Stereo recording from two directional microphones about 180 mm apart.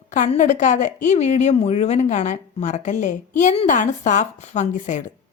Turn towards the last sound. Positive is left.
turn(degrees=40)  # may be behind; listen again after turning